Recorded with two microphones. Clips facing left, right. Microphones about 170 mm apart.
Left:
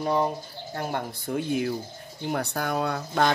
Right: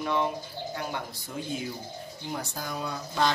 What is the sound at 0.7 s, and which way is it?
Speech, 50° left (ahead or behind).